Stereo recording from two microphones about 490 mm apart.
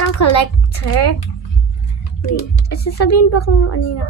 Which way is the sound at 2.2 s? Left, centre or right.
Left.